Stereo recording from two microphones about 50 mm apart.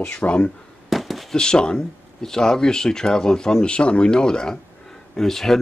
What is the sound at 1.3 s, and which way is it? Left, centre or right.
Speech, centre.